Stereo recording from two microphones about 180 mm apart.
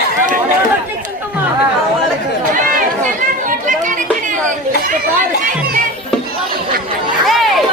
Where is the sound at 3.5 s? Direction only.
45° right (ahead or behind).